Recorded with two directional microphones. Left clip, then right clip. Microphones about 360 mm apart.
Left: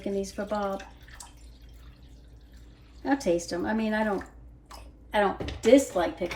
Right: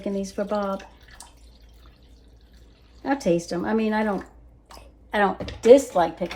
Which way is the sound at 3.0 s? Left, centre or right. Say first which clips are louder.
Right 3 dB; right.